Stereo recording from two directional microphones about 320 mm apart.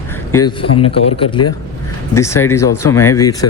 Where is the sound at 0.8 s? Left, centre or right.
Centre.